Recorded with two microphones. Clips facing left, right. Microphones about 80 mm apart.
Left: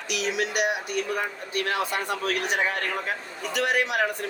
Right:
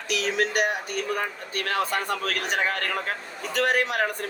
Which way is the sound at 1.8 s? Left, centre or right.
Right.